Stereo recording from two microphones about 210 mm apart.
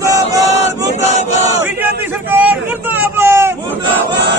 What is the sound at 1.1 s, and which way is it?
Chant, 30° left (ahead or behind).